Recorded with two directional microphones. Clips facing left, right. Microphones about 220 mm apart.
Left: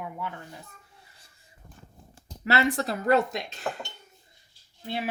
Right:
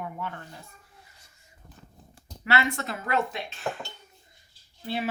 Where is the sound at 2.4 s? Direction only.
35° left (ahead or behind).